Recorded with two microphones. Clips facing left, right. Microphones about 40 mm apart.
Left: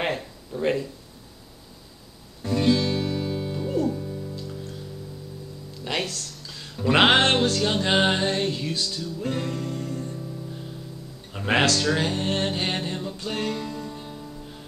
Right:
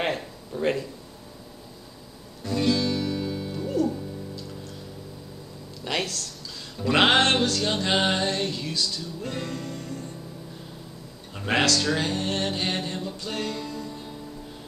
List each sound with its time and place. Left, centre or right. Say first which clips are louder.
0.0 s a sound: even; centre
2.4 s music: left 2 dB; left
3.5 s music: right 1 dB; centre
5.9 s a sound: even; centre
6.8 s music: left 2 dB; centre
7.2 s music: left 1 dB; left
7.6 s music: left 2 dB; centre
7.9 s music: left 2 dB; left
11.3 s speech: left 2 dB; centre
12.0 s music: left 2 dB; left